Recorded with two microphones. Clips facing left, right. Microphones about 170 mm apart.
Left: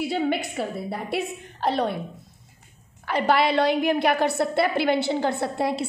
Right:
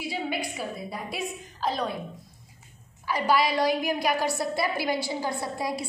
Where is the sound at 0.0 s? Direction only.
60° left (ahead or behind).